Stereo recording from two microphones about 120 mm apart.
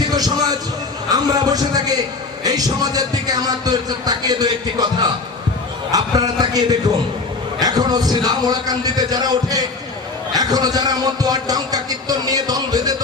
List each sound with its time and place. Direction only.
1.1 s speech: 35° right (ahead or behind)